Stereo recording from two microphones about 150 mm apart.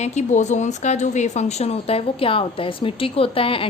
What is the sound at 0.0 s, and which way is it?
A woman's voice, 50° left (ahead or behind).